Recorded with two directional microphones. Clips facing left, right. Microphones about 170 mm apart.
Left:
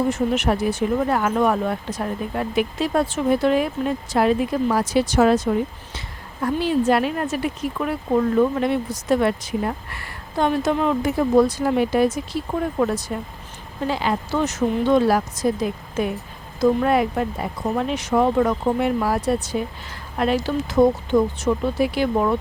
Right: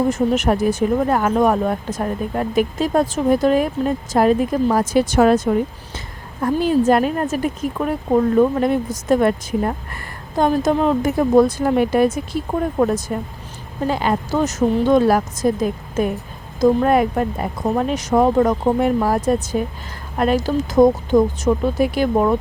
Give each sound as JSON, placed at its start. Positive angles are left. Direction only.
{"t": 0.1, "sound": "speech", "side_deg": -45}